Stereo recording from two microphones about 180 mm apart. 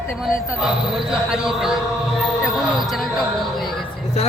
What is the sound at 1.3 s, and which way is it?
Speech, 5° right (ahead or behind).